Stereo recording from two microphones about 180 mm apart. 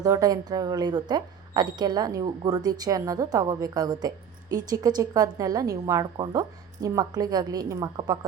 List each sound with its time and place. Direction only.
0.0 s speech: 20° right (ahead or behind)